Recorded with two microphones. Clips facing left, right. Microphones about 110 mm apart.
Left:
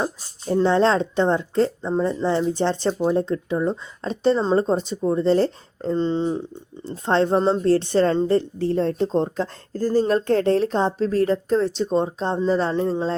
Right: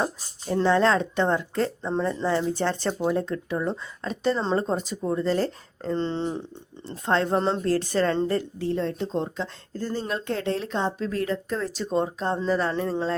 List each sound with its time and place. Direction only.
0.4 s speech: 25° left (ahead or behind)
1.8 s speech: 5° left (ahead or behind)
2.4 s speech: 20° left (ahead or behind)
5.9 s speech: 15° left (ahead or behind)
6.8 s speech: 25° left (ahead or behind)
8.5 s speech: 40° left (ahead or behind); by 13.1 s 25° left (ahead or behind)